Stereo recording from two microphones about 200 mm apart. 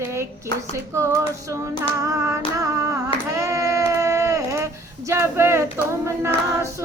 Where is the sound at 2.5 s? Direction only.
15° right (ahead or behind).